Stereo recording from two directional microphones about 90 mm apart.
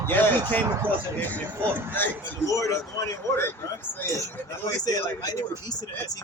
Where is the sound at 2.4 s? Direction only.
40° left (ahead or behind).